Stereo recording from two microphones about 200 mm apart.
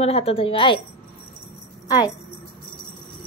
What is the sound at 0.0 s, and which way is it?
Speech, 30° left (ahead or behind).